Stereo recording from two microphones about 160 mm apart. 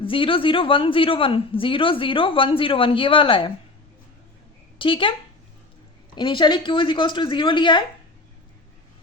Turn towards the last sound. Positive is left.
turn(degrees=30)  # may be behind; listen again after turning